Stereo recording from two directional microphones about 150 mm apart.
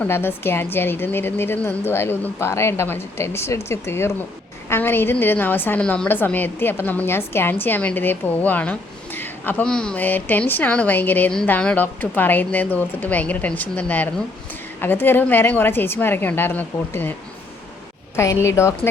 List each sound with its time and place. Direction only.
0.0 s a woman's voice: 15° left (ahead or behind)
18.2 s speech: 20° left (ahead or behind)